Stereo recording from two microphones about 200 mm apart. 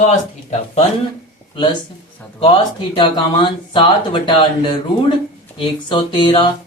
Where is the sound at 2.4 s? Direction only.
30° left (ahead or behind).